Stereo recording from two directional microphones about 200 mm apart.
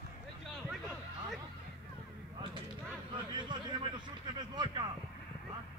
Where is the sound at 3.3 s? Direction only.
25° right (ahead or behind).